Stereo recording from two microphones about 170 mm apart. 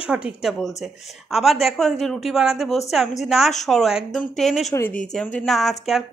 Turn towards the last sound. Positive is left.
turn(degrees=0)  # may be behind; listen again after turning